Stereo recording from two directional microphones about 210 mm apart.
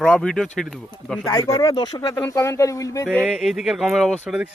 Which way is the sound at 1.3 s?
15° left (ahead or behind).